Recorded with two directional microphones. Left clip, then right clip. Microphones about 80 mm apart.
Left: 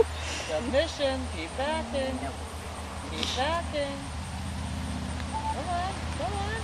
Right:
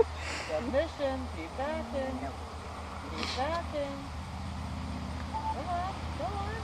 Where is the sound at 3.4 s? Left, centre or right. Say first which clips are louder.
Left 4 dB; left.